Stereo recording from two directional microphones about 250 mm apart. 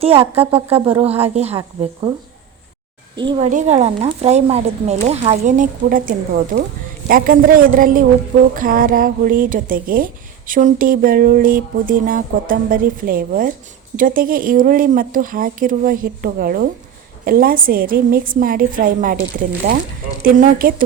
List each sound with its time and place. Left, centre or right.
0.0 s speech: right
3.2 s speech: right